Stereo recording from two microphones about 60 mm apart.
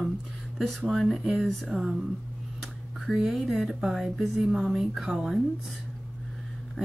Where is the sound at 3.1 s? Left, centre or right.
Centre.